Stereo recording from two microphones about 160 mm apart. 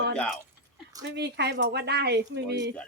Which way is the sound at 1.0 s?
90° right.